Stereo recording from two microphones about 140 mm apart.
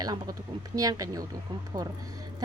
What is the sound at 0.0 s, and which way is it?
Speech, 30° right (ahead or behind).